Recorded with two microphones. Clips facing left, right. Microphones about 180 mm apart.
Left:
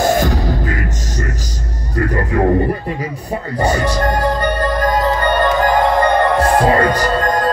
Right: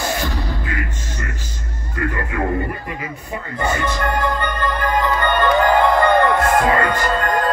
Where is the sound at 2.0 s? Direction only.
40° left (ahead or behind).